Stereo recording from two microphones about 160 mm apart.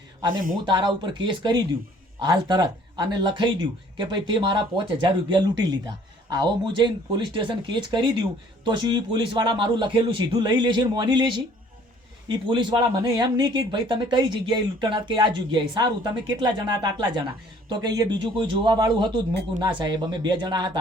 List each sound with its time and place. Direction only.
0.6 s speech: 30° right (ahead or behind)
12.5 s speech: 30° right (ahead or behind)